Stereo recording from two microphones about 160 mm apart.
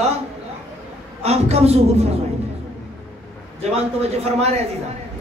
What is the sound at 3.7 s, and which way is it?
Speech, 40° right (ahead or behind).